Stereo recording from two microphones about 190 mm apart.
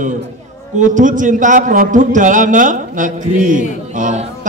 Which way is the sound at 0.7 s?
45° right (ahead or behind).